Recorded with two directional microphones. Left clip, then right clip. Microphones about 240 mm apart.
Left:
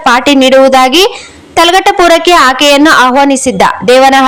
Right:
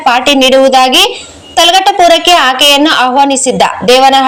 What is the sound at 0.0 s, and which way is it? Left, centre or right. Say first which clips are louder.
A woman's voice: left 1 dB; left.